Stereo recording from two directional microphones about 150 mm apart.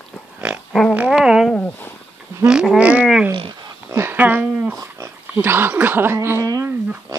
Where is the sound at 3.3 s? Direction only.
35° right (ahead or behind).